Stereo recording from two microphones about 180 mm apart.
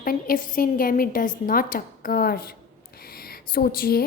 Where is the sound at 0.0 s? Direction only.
50° left (ahead or behind).